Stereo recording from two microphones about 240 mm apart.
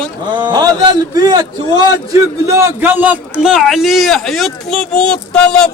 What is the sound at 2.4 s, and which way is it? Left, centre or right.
A man's voice, centre.